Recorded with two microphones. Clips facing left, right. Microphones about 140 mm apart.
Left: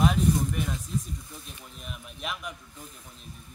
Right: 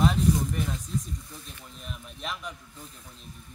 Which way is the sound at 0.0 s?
10° left (ahead or behind).